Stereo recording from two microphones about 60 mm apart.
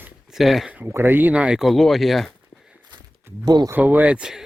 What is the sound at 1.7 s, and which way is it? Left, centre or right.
Speech, centre.